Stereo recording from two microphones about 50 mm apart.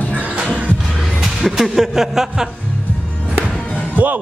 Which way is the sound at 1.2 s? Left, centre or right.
Centre.